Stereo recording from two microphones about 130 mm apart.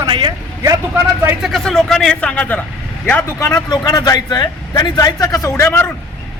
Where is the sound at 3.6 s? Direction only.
30° left (ahead or behind).